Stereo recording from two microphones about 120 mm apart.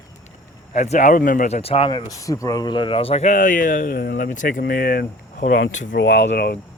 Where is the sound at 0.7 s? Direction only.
80° left; by 1.9 s 55° left (ahead or behind).